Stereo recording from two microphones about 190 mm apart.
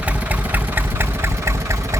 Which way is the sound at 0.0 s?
10° right (ahead or behind).